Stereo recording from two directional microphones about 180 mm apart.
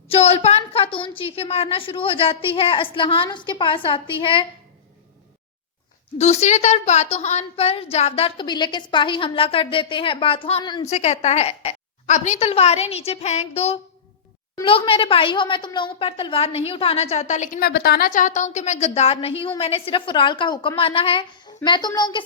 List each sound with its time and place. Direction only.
0.1 s a woman's voice: 35° left (ahead or behind)
6.1 s a woman's voice: 40° left (ahead or behind)
10.8 s a woman's voice: 40° left (ahead or behind)